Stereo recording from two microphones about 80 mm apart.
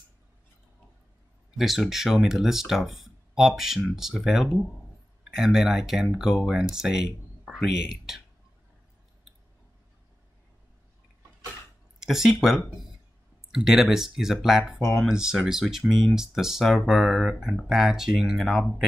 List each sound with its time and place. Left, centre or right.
1.6 s speech: centre
12.0 s speech: centre